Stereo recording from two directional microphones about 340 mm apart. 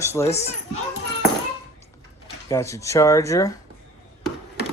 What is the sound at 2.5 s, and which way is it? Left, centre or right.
Speech, centre.